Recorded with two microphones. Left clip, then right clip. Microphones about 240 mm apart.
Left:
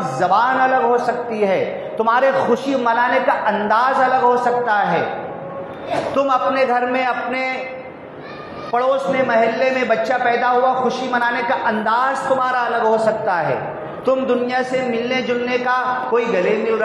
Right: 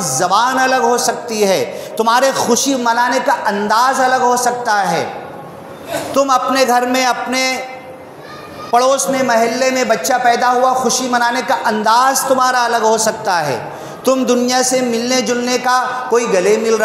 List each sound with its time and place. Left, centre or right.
0.2 s a man's voice: right
6.1 s a man's voice: right
8.7 s a man's voice: right